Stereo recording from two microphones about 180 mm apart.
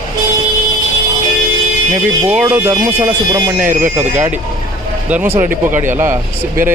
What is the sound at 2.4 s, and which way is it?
Speech, 15° right (ahead or behind).